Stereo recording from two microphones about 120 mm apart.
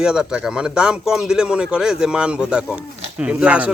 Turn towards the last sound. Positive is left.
turn(degrees=-10)  # may be behind; listen again after turning